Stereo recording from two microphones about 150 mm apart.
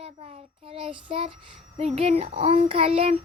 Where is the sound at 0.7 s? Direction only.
35° right (ahead or behind).